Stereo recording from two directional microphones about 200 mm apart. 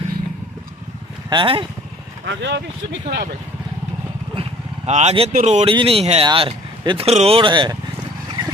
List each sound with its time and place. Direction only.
1.3 s speech: 25° right (ahead or behind)
2.2 s speech: 60° right (ahead or behind)
4.4 s speech: 35° right (ahead or behind)